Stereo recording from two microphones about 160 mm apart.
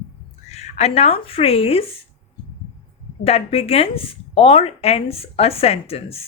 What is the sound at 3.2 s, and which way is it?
Speech, 40° left (ahead or behind).